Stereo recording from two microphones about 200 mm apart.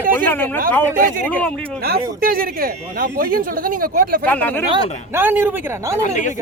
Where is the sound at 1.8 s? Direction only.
50° right (ahead or behind).